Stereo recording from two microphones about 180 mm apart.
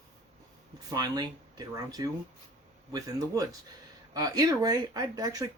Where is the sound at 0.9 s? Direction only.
20° right (ahead or behind).